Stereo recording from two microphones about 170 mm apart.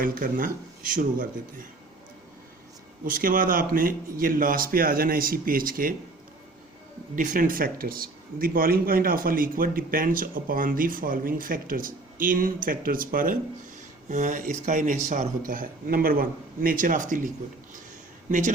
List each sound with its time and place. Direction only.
0.0 s speech: 55° right (ahead or behind)
3.0 s a man's voice: 55° right (ahead or behind)
7.2 s a man's voice: 55° right (ahead or behind)